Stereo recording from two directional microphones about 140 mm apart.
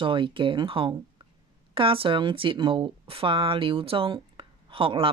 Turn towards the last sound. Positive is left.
turn(degrees=-40)  # may be behind; listen again after turning